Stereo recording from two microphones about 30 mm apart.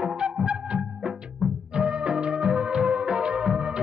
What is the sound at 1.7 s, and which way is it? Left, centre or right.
Music of bollywood, right.